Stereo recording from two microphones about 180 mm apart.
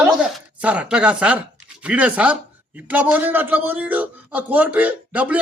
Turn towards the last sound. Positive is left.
turn(degrees=-10)  # may be behind; listen again after turning